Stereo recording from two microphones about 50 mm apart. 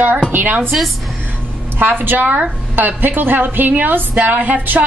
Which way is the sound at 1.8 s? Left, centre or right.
Right.